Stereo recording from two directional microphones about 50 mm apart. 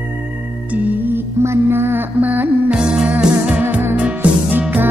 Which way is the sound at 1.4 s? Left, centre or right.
Right.